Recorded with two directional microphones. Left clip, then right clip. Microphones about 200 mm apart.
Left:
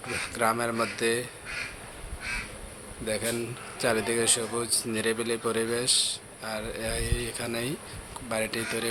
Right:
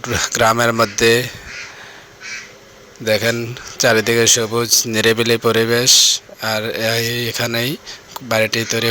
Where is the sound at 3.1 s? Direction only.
35° right (ahead or behind).